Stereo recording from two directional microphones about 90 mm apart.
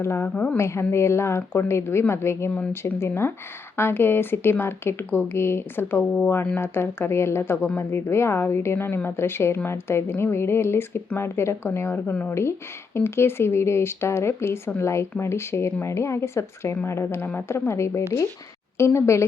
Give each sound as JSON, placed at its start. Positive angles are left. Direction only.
{"t": 0.0, "sound": "a woman's voice", "side_deg": 30}